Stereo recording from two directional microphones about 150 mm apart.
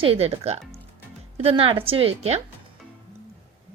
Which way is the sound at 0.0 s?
40° right (ahead or behind).